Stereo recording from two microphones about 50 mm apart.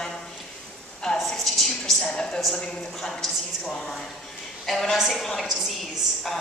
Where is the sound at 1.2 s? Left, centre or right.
Centre.